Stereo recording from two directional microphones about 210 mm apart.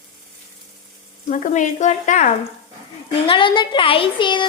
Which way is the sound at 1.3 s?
35° left (ahead or behind).